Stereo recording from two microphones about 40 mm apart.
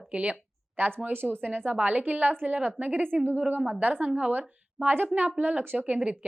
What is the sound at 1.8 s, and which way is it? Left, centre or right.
A woman's voice, right.